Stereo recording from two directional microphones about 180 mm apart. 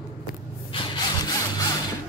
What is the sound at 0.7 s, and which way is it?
Sawing, 25° left (ahead or behind).